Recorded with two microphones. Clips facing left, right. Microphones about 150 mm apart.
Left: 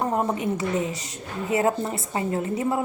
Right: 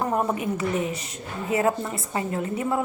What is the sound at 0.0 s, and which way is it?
A woman's voice, 20° left (ahead or behind).